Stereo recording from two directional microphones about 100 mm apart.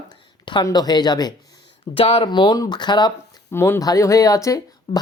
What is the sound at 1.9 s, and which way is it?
Speech, 80° left.